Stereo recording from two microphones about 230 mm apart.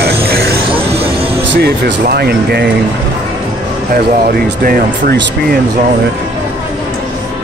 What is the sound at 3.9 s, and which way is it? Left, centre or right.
Speech, right.